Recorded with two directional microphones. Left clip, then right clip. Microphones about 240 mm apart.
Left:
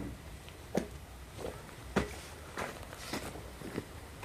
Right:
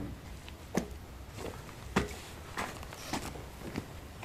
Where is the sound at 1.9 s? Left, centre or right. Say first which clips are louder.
Right 1 dB; right.